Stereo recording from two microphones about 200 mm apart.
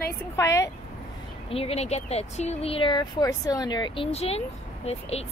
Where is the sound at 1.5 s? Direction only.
30° left (ahead or behind).